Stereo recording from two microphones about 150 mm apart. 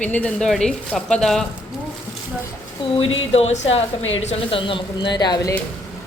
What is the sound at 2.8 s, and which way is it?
A woman's voice, 40° left (ahead or behind).